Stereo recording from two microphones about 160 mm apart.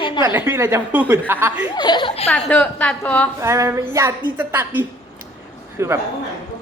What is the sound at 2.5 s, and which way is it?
Speech, 10° left (ahead or behind).